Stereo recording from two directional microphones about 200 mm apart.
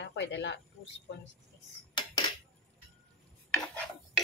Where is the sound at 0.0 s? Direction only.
65° left (ahead or behind).